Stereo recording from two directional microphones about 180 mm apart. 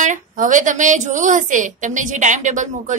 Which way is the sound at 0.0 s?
45° right (ahead or behind).